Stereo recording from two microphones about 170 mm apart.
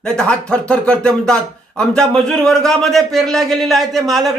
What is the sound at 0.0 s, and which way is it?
Speech, 5° left (ahead or behind).